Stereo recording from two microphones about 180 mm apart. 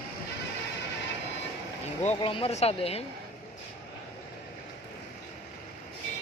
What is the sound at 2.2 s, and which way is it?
Speech, 30° left (ahead or behind).